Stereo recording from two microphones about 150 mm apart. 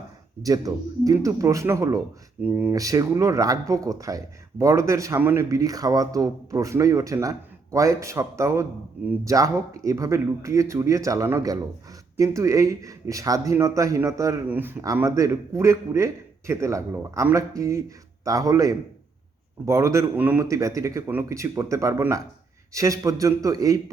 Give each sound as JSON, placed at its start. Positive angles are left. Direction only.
{"t": 0.4, "sound": "speech", "side_deg": -25}